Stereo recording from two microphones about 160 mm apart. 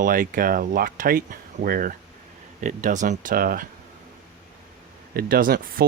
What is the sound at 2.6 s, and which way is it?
Speech, 50° right (ahead or behind).